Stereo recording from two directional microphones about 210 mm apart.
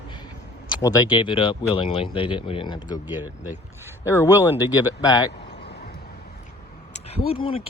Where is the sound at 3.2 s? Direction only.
10° right (ahead or behind).